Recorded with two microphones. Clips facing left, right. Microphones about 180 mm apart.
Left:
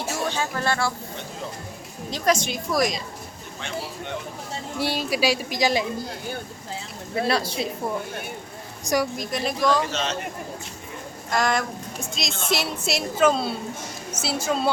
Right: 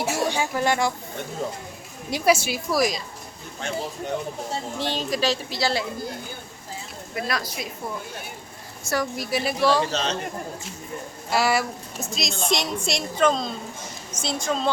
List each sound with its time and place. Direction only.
0.3 s speech: 15° right (ahead or behind)
2.0 s a woman's voice: 10° right (ahead or behind)
4.8 s speech: 10° left (ahead or behind)
7.2 s a woman's voice: 30° left (ahead or behind)
8.8 s a woman's voice: 15° left (ahead or behind)
9.1 s a woman's voice: 5° right (ahead or behind)
9.9 s a man's voice: 35° right (ahead or behind)
11.3 s a woman's voice: 5° right (ahead or behind)